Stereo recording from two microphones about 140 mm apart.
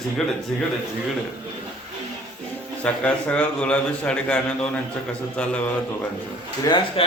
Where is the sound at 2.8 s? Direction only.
10° left (ahead or behind).